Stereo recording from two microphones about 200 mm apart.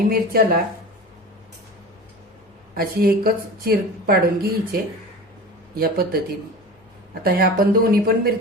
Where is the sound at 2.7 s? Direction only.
50° right (ahead or behind).